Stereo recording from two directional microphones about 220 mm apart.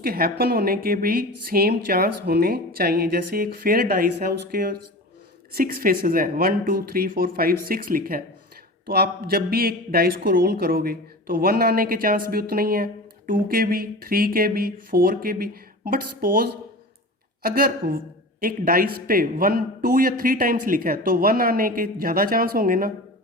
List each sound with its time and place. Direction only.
0.0 s a man's voice: 45° right (ahead or behind)